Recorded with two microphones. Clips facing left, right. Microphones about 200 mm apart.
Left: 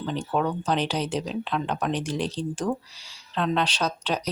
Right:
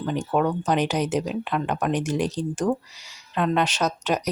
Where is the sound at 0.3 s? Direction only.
10° right (ahead or behind).